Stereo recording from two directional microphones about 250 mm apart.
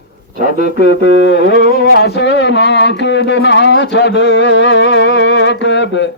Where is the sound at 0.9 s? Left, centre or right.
Left.